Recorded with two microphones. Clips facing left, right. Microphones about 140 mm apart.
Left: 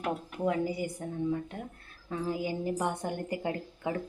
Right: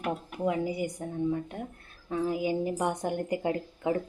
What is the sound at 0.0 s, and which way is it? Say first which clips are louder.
Speech: right 1 dB; 15° right (ahead or behind).